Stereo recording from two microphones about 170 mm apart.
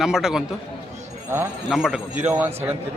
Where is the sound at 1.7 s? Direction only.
5° right (ahead or behind).